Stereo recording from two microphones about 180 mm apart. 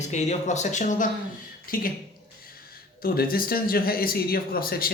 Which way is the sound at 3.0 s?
55° left (ahead or behind).